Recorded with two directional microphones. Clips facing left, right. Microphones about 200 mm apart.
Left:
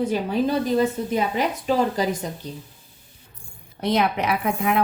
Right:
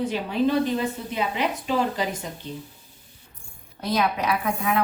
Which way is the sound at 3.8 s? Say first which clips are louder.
Left 3 dB; 25° left (ahead or behind).